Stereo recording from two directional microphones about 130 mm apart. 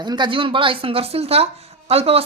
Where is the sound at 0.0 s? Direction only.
35° right (ahead or behind).